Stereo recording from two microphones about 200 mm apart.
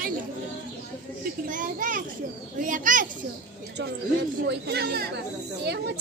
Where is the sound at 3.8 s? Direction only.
60° right (ahead or behind).